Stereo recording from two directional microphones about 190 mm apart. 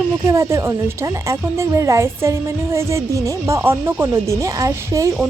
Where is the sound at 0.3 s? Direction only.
15° right (ahead or behind).